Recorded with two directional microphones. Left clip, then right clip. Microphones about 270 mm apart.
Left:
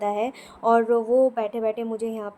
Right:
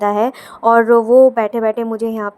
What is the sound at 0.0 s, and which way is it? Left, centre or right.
Speech, right.